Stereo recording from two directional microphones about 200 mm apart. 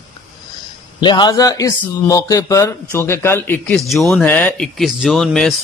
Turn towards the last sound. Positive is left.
turn(degrees=0)  # may be behind; listen again after turning